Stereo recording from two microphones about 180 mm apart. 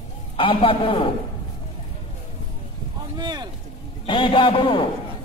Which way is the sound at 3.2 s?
25° right (ahead or behind).